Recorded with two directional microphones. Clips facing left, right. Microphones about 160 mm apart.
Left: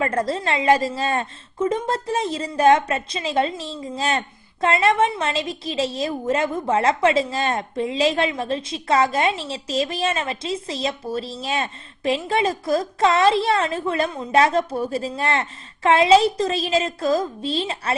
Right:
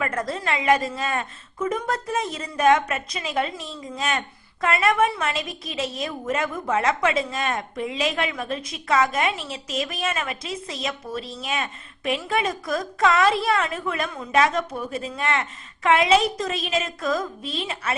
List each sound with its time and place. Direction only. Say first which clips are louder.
0.0 s a woman's voice: left 4 dB; 30° left (ahead or behind)